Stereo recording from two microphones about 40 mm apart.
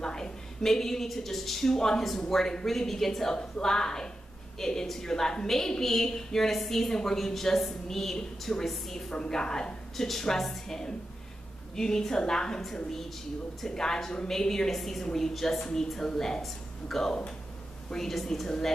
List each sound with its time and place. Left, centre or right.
0.0 s a woman's voice: centre
3.3 s a woman's voice: left
9.1 s a woman's voice: left
9.9 s a woman's voice: centre